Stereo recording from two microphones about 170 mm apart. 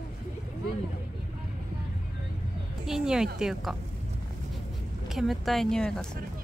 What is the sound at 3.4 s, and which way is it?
Speech, 5° right (ahead or behind).